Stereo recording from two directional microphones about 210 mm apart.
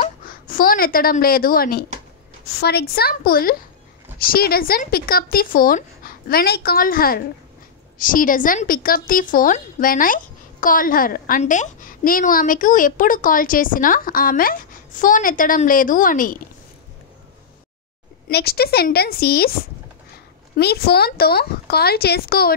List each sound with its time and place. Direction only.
0.0 s a woman's voice: 40° left (ahead or behind)
18.3 s speech: 50° left (ahead or behind)
20.5 s speech: 50° left (ahead or behind)